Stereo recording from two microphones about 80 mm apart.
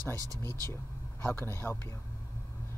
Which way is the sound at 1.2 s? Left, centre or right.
Left.